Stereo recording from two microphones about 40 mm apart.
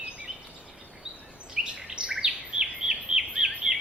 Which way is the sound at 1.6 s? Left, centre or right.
Centre.